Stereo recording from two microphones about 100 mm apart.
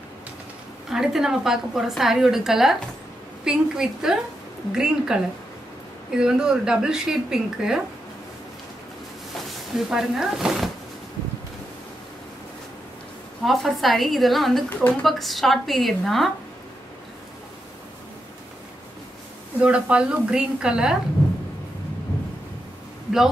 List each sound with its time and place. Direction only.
0.8 s a woman's voice: 5° right (ahead or behind)
9.8 s a woman's voice: 5° right (ahead or behind)
13.4 s a woman's voice: centre (ahead or behind)
14.7 s speech: 15° left (ahead or behind)
15.0 s a woman's voice: centre (ahead or behind)
19.6 s a woman's voice: 10° right (ahead or behind)